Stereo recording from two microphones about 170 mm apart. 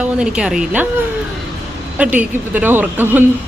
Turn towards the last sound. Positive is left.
turn(degrees=-10)  # may be behind; listen again after turning